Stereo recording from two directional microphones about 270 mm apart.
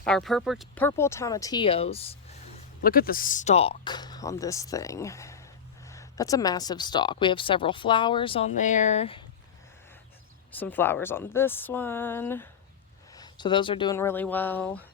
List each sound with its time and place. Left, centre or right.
0.0 s speech: centre; by 2.1 s left
2.8 s speech: left
10.5 s speech: centre